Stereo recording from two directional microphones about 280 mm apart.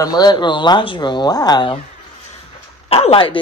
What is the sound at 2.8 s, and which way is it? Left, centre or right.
Speech, left.